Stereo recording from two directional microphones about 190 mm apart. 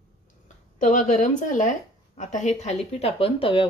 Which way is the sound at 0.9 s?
40° left (ahead or behind).